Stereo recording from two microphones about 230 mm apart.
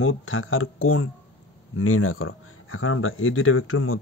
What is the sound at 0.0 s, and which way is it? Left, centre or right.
Speech, left.